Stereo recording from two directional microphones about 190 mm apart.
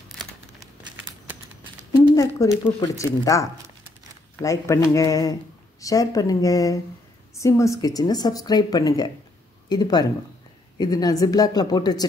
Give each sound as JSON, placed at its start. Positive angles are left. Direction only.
{"t": 2.1, "sound": "a woman's voice", "side_deg": 15}